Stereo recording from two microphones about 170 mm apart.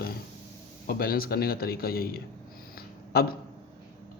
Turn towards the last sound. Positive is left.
turn(degrees=65)  # may be behind; listen again after turning